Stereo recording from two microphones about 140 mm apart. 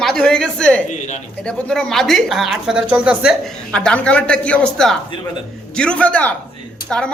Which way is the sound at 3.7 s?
5° left (ahead or behind).